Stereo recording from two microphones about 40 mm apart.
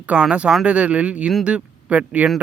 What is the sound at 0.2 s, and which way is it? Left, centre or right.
Speech, right.